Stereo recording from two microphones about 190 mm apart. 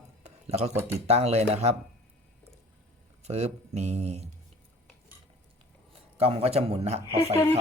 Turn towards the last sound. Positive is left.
turn(degrees=20)  # may be behind; listen again after turning